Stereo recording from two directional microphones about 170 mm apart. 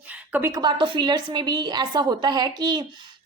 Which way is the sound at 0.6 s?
25° right (ahead or behind).